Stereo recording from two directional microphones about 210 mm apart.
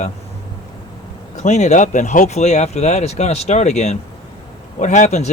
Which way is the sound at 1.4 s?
35° left (ahead or behind).